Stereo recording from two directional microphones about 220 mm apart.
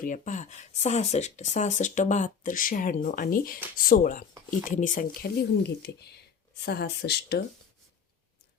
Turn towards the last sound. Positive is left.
turn(degrees=50)  # may be behind; listen again after turning